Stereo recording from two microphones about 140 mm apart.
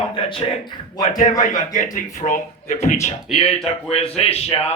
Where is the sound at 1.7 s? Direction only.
65° left (ahead or behind).